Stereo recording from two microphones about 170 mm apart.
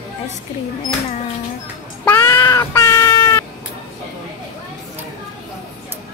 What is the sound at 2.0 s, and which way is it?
Meow, 10° left (ahead or behind).